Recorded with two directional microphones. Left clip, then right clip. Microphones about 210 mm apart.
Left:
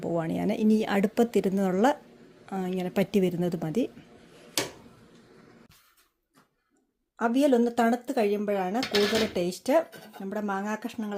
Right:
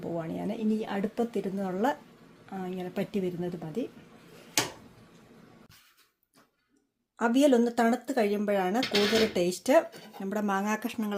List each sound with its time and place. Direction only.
0.0 s speech: 30° left (ahead or behind)
7.2 s speech: 5° left (ahead or behind)